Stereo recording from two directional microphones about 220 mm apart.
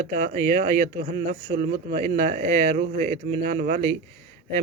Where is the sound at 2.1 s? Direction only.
35° right (ahead or behind).